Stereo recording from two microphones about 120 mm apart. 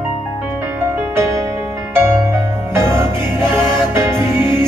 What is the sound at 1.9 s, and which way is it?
Music, 20° right (ahead or behind).